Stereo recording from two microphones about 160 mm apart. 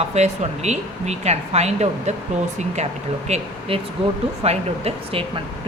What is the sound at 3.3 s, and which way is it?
A woman's voice, 45° right (ahead or behind).